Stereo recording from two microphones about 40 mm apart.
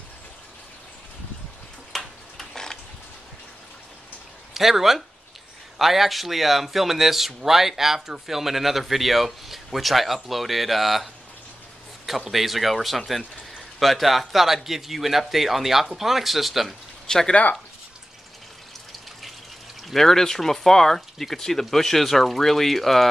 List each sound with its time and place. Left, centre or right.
1.9 s tick-tock: centre
4.6 s speech: centre
12.3 s speech: centre
17.1 s speech: centre
19.8 s speech: centre